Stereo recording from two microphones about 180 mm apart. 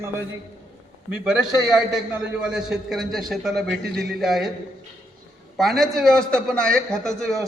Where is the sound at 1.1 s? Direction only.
5° right (ahead or behind).